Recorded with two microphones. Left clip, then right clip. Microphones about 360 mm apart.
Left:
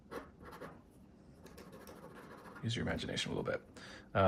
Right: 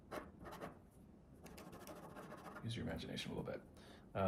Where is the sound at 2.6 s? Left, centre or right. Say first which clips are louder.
Left 10 dB; centre.